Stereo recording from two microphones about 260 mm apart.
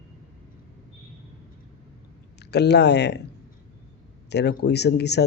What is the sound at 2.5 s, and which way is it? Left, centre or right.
Speech, left.